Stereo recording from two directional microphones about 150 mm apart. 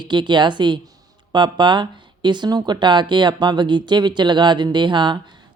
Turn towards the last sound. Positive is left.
turn(degrees=-30)  # may be behind; listen again after turning